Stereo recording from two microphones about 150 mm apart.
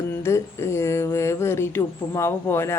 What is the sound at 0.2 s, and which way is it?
Speech, 20° left (ahead or behind).